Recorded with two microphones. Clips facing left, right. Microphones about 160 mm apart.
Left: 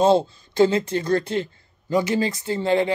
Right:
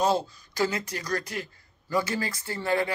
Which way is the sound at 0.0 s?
25° left (ahead or behind).